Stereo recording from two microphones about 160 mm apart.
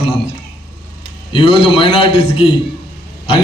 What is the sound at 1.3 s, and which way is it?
A man's voice, 35° left (ahead or behind).